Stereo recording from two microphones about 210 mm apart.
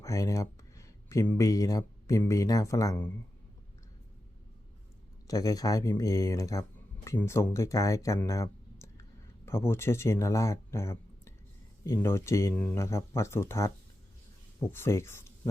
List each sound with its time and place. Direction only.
0.0 s speech: 15° left (ahead or behind)
5.3 s speech: 15° left (ahead or behind)